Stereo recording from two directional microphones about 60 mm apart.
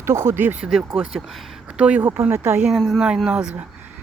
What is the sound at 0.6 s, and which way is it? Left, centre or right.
Speech, centre.